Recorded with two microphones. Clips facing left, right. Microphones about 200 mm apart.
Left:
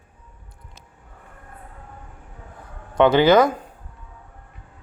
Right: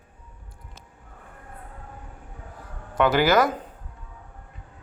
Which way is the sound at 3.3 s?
5° right (ahead or behind).